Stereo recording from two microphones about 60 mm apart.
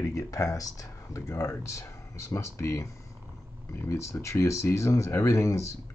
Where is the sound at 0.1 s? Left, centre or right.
Left.